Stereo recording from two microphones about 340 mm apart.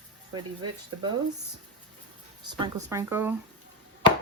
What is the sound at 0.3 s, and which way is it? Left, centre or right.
Speech, centre.